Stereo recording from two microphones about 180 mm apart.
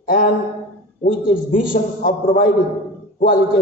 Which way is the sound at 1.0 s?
50° left (ahead or behind).